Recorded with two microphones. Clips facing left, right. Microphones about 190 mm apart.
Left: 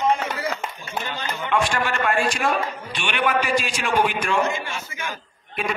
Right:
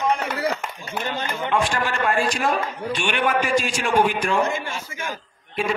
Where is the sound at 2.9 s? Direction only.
45° right (ahead or behind).